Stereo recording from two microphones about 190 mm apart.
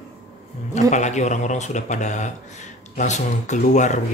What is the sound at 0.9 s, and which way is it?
Speech, 40° left (ahead or behind).